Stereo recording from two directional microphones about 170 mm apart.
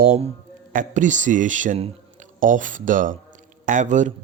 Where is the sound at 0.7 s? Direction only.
50° right (ahead or behind).